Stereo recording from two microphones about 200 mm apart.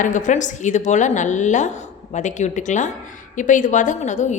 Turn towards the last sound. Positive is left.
turn(degrees=35)  # may be behind; listen again after turning